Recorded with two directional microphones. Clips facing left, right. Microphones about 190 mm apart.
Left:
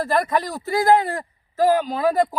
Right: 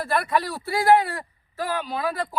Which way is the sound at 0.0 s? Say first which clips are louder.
Left 3 dB; 40° left (ahead or behind).